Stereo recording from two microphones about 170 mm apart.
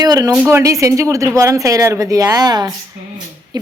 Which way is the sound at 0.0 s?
25° right (ahead or behind).